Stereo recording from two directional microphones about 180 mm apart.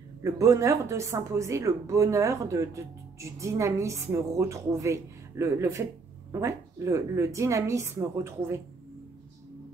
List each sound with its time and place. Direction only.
0.2 s speech: 15° right (ahead or behind)